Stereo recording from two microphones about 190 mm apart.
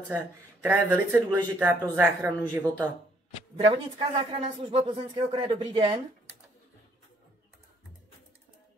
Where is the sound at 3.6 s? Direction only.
35° right (ahead or behind).